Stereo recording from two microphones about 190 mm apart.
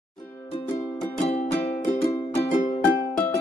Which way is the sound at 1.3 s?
30° left (ahead or behind).